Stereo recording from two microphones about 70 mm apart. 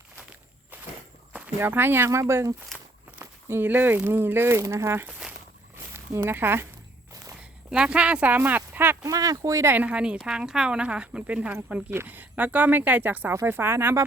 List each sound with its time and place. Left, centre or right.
1.5 s speech: right
2.0 s speech: right
3.5 s speech: right
5.7 s a sound: right
7.7 s speech: centre
9.0 s speech: right
9.7 s speech: centre